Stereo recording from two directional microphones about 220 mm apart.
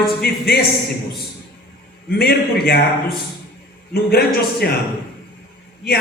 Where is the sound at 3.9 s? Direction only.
45° left (ahead or behind).